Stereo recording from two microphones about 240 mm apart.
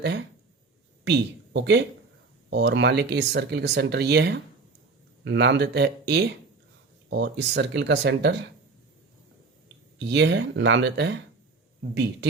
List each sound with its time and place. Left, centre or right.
0.0 s speech: right
10.0 s speech: right